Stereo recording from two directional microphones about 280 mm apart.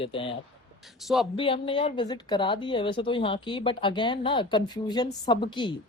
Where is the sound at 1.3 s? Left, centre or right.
Centre.